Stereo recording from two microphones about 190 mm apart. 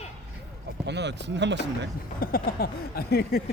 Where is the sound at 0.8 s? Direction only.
65° right (ahead or behind).